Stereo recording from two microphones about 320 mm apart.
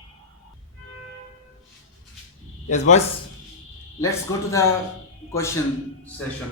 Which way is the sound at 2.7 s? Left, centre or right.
Left.